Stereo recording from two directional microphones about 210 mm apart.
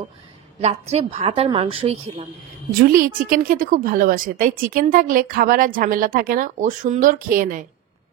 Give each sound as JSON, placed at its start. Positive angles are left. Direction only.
{"t": 0.6, "sound": "a woman's voice", "side_deg": -30}
{"t": 2.8, "sound": "a woman's voice", "side_deg": -45}